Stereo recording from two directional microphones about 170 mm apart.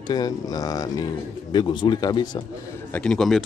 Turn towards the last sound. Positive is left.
turn(degrees=5)  # may be behind; listen again after turning